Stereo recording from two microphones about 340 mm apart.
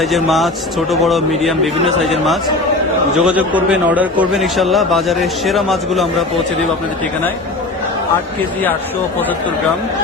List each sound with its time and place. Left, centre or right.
0.0 s a man's voice: centre